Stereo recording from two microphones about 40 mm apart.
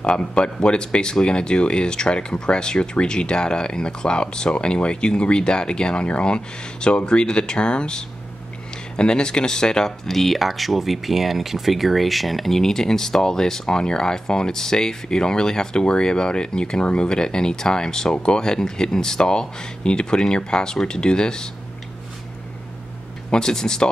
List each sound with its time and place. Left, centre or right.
0.0 s speech: left
23.3 s speech: centre